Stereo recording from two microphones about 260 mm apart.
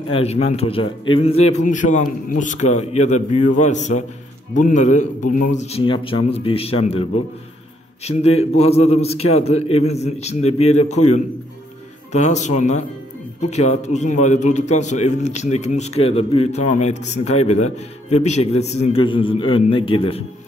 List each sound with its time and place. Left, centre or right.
0.1 s a man's voice: left
12.1 s a man's voice: left